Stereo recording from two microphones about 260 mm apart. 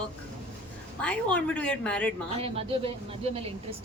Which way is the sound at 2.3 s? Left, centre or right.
Right.